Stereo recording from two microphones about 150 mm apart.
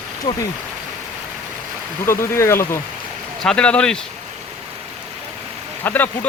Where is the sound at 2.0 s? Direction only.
20° left (ahead or behind).